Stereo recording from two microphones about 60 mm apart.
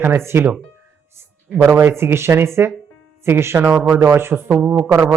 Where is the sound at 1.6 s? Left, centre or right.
Right.